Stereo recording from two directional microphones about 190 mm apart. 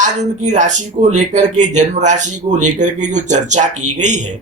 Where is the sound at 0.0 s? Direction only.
40° right (ahead or behind).